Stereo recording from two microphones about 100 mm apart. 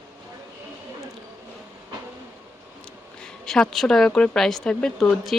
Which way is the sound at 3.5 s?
5° left (ahead or behind).